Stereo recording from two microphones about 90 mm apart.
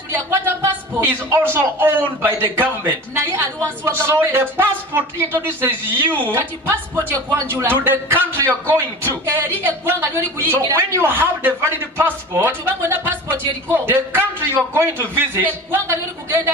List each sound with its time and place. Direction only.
0.1 s a man's voice: 30° right (ahead or behind)
7.6 s a man's voice: 25° right (ahead or behind)